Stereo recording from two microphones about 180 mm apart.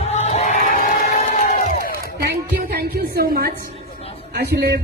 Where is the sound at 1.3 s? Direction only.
40° left (ahead or behind).